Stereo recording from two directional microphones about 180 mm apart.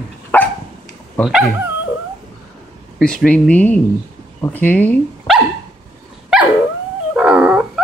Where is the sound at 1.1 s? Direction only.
Centre (ahead or behind).